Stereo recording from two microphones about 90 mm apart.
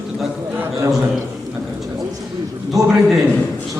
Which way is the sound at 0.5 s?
25° right (ahead or behind).